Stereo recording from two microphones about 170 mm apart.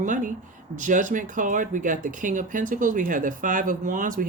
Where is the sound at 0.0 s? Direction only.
50° right (ahead or behind).